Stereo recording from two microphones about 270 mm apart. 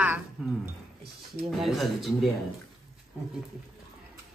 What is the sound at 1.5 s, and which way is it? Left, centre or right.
Speech, centre.